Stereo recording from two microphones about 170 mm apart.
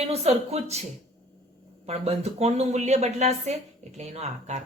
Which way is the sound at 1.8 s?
40° right (ahead or behind).